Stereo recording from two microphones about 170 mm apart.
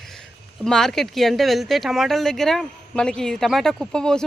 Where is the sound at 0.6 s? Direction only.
5° left (ahead or behind).